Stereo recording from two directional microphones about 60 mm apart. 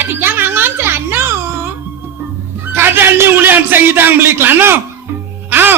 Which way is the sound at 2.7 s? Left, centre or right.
Right.